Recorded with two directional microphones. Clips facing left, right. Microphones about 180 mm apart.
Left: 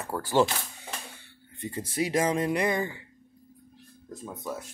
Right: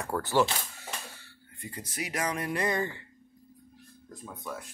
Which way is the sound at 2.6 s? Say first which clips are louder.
Left 2 dB; 10° left (ahead or behind).